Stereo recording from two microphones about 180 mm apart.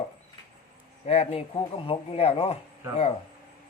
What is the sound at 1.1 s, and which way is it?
Speech, 35° left (ahead or behind).